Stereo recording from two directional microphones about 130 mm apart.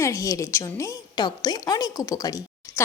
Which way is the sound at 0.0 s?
25° left (ahead or behind).